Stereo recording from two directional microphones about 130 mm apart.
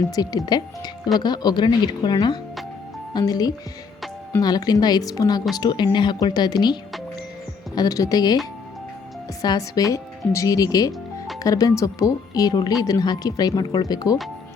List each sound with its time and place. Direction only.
0.2 s speech: 30° left (ahead or behind)
7.8 s speech: 25° left (ahead or behind)
9.4 s speech: 30° left (ahead or behind)